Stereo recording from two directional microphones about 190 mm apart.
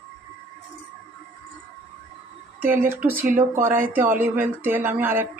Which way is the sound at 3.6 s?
10° right (ahead or behind).